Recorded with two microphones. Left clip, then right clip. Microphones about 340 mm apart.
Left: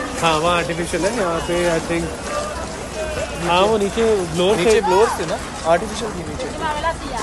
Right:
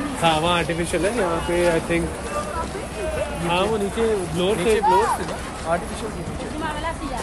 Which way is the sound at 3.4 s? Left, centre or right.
Centre.